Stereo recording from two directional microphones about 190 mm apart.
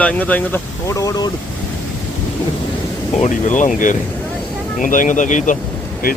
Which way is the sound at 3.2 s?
40° left (ahead or behind).